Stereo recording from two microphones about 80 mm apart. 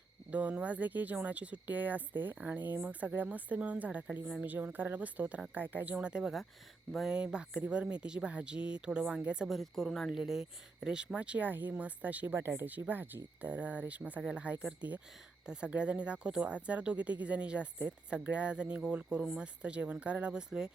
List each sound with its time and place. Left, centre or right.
0.3 s speech: centre
4.5 s speech: right
9.5 s speech: centre; by 12.4 s right
12.4 s speech: right
12.6 s speech: right